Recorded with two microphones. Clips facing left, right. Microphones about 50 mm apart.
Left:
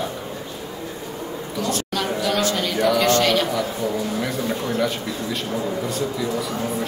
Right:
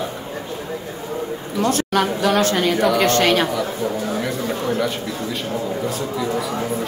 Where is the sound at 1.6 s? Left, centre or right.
Right.